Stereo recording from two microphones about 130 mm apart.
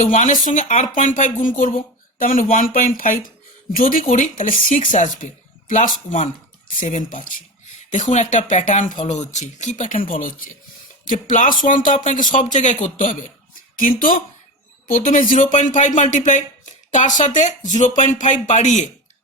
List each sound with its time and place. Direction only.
0.0 s speech: 75° left (ahead or behind)
4.9 s speech: 75° left (ahead or behind)
9.0 s speech: 65° left (ahead or behind); by 13.2 s 80° left
13.7 s speech: 90° left; by 18.9 s 70° left (ahead or behind)